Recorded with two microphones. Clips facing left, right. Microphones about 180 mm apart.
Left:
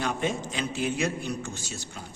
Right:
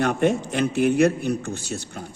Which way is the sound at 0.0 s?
60° right (ahead or behind).